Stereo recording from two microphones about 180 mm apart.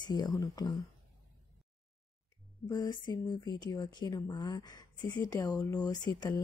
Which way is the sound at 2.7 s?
20° left (ahead or behind).